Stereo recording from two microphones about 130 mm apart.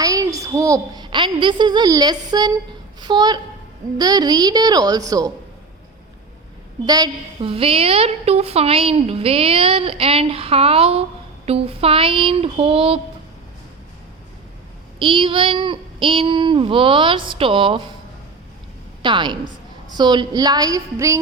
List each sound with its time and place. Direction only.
0.0 s a child's voice: 25° right (ahead or behind)
6.8 s speech: 30° right (ahead or behind)
7.4 s a woman's voice: 45° right (ahead or behind)
14.9 s speech: 40° right (ahead or behind)
19.0 s speech: 35° right (ahead or behind)